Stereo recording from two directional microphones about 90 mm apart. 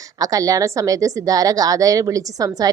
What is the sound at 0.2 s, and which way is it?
A woman's voice, 40° right (ahead or behind).